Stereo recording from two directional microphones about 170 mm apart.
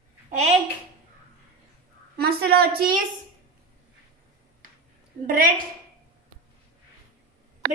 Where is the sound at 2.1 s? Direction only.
65° right (ahead or behind).